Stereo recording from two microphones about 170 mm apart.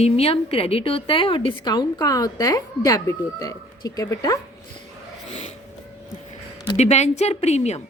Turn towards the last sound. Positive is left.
turn(degrees=40)  # may be behind; listen again after turning